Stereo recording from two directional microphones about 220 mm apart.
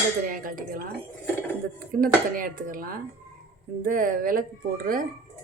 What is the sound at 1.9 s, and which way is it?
Speech, 40° right (ahead or behind).